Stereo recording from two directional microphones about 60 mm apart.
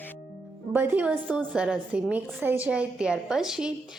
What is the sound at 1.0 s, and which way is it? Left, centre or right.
A woman's voice, right.